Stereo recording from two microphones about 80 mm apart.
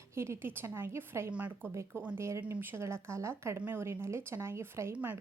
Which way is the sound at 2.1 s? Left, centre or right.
Right.